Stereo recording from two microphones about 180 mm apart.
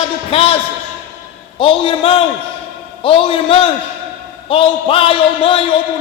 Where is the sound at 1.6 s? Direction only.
30° left (ahead or behind).